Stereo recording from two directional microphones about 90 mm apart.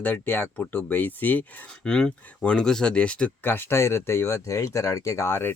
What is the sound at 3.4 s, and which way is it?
Speech, 25° left (ahead or behind).